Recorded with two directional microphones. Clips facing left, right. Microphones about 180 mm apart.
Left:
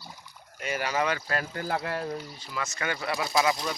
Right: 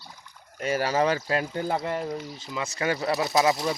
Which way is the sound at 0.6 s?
35° right (ahead or behind).